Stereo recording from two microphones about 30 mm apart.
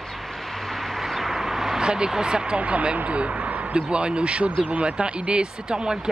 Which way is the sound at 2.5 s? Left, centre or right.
Right.